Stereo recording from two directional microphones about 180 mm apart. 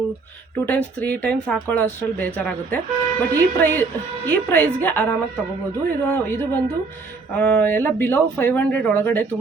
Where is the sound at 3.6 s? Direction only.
10° left (ahead or behind).